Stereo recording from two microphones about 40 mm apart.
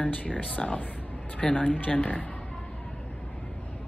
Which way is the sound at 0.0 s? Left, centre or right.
Left.